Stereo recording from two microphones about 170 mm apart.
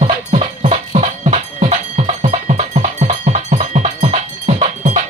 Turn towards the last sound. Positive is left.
turn(degrees=-35)  # may be behind; listen again after turning